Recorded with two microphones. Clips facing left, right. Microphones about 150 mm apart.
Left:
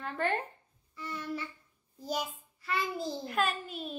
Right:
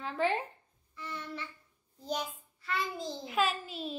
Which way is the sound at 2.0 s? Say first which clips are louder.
Left 1 dB; 10° left (ahead or behind).